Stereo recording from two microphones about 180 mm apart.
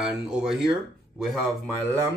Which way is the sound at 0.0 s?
Centre (ahead or behind).